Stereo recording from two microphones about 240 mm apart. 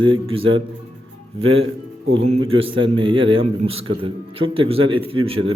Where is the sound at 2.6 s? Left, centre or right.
Right.